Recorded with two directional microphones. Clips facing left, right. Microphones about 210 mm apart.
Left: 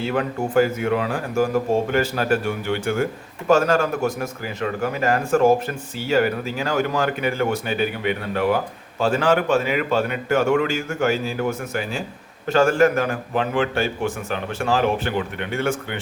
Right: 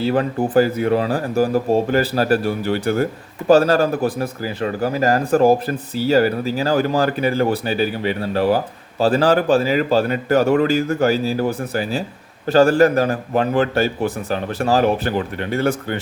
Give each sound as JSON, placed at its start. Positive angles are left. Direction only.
{"t": 0.0, "sound": "speech", "side_deg": -35}